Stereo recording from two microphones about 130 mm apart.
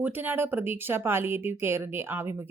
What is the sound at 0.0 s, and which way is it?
Speech, 15° right (ahead or behind).